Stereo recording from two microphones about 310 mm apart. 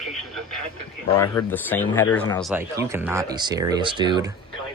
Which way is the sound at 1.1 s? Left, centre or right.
Centre.